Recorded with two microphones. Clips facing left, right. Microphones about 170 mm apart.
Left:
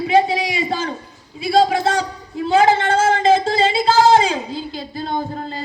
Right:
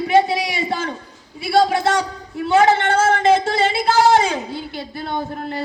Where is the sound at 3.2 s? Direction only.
65° right (ahead or behind).